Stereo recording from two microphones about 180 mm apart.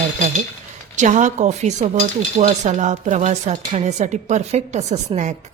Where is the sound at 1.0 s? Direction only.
40° right (ahead or behind).